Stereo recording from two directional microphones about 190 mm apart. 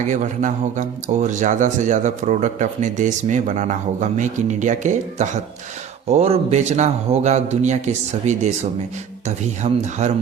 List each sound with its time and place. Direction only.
0.0 s speech: 40° right (ahead or behind)